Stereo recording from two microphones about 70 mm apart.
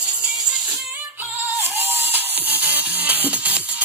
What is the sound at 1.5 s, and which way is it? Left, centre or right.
Music, right.